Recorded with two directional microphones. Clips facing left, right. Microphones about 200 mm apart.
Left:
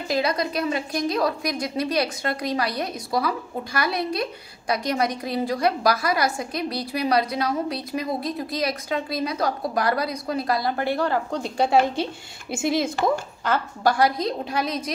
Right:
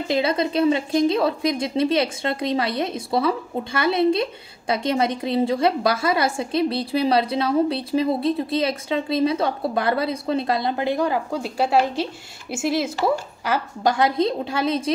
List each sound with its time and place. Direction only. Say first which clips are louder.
0.1 s a woman's voice: right 3 dB; 25° right (ahead or behind); by 12.9 s centre (ahead or behind)
13.5 s a woman's voice: even; 20° right (ahead or behind)